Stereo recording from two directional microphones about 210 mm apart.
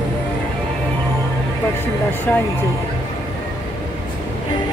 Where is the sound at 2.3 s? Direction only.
5° left (ahead or behind).